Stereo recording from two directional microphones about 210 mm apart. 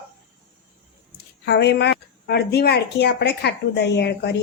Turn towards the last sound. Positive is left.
turn(degrees=50)  # may be behind; listen again after turning